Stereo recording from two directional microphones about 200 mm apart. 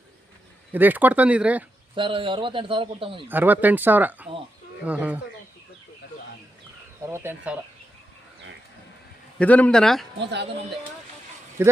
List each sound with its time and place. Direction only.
0.7 s speech: 10° right (ahead or behind)
2.0 s speech: 25° right (ahead or behind)
3.2 s speech: 10° right (ahead or behind)
7.0 s speech: 10° right (ahead or behind)
9.4 s speech: 5° left (ahead or behind)
11.6 s speech: 10° right (ahead or behind)